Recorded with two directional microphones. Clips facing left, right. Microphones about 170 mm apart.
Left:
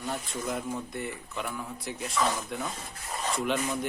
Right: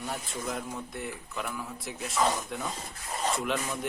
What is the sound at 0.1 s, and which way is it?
A man's voice, centre (ahead or behind).